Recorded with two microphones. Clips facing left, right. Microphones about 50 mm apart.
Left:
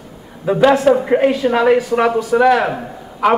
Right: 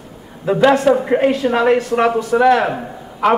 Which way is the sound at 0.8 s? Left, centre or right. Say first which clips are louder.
Left 1 dB; centre.